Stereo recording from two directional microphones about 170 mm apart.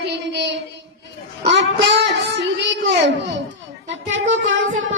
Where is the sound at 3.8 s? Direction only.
90° right.